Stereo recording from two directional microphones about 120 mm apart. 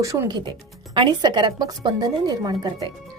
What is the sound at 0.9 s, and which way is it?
A woman's voice, 40° right (ahead or behind).